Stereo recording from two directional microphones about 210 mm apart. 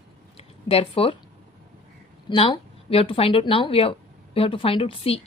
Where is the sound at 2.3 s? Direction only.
25° left (ahead or behind).